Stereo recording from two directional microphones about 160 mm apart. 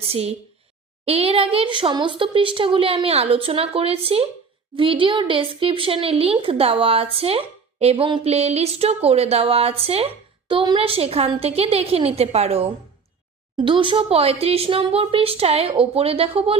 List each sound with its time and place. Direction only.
0.1 s speech: 40° right (ahead or behind)